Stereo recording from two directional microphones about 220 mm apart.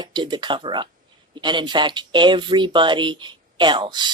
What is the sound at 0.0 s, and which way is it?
Speech, 20° right (ahead or behind).